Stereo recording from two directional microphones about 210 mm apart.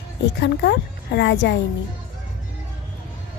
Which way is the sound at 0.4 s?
55° left (ahead or behind).